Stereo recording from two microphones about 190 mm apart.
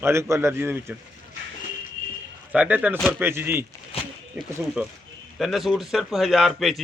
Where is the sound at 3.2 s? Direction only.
10° right (ahead or behind).